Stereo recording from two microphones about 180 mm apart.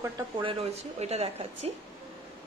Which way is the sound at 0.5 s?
35° right (ahead or behind).